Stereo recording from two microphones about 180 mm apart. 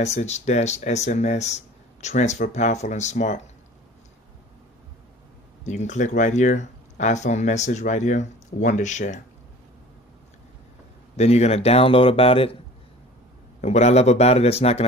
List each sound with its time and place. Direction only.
0.0 s speech: 40° left (ahead or behind)
5.6 s speech: 40° left (ahead or behind)
11.1 s speech: 35° left (ahead or behind)
13.6 s speech: 40° left (ahead or behind)